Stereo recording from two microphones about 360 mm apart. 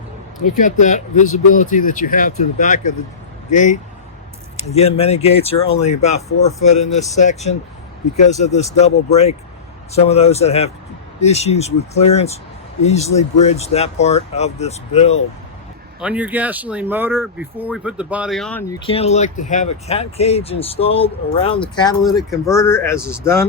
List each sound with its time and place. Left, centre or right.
0.4 s speech: left
16.0 s speech: centre
18.9 s speech: centre